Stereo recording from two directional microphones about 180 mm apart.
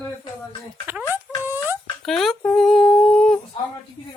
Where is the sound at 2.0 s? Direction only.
Centre (ahead or behind).